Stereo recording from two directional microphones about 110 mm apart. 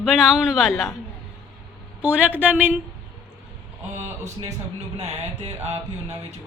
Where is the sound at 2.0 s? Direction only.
15° right (ahead or behind).